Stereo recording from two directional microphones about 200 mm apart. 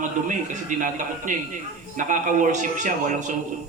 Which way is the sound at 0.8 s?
40° right (ahead or behind).